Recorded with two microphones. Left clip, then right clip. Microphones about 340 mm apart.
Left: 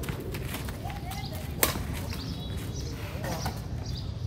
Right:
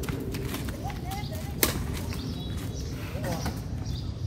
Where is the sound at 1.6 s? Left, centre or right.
Centre.